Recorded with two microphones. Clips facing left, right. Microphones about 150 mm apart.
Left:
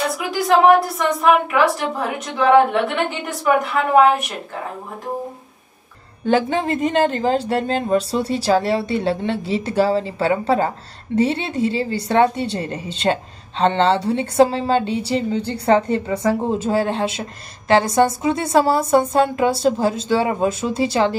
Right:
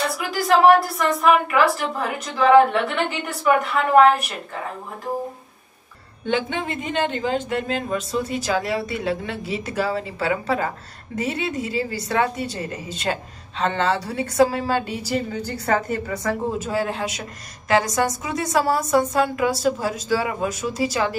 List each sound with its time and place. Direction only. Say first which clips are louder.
0.0 s a woman's voice: left 3 dB; centre (ahead or behind)
6.2 s a woman's voice: left 6 dB; 40° left (ahead or behind)